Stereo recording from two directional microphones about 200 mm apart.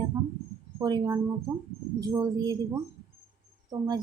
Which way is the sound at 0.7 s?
20° right (ahead or behind).